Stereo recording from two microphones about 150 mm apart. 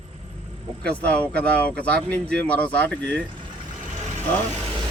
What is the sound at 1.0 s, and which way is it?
Speech, 10° left (ahead or behind).